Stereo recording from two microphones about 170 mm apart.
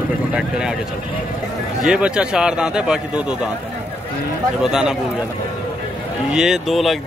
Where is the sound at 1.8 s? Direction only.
5° right (ahead or behind).